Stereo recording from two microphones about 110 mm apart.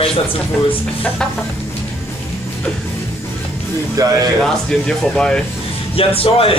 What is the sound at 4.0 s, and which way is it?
Speech, 30° right (ahead or behind).